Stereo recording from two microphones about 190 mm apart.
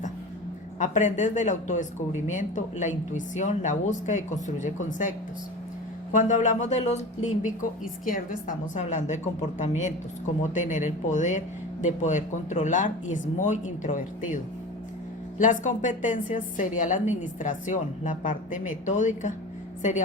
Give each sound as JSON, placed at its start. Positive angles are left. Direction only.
{"t": 0.8, "sound": "speech", "side_deg": 40}
{"t": 15.4, "sound": "a woman's voice", "side_deg": 40}